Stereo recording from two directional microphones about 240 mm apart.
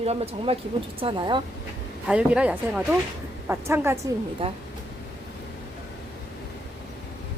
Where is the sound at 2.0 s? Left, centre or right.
Centre.